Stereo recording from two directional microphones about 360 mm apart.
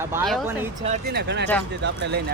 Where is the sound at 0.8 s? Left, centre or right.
Right.